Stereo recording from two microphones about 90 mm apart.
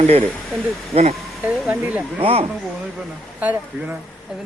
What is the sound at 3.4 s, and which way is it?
Speech, 15° right (ahead or behind).